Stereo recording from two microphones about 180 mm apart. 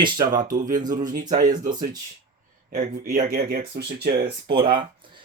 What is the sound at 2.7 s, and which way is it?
Speech, 55° right (ahead or behind).